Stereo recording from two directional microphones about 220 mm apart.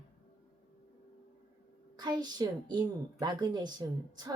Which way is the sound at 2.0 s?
20° right (ahead or behind).